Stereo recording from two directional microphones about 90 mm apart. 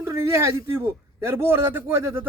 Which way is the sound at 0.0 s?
30° right (ahead or behind).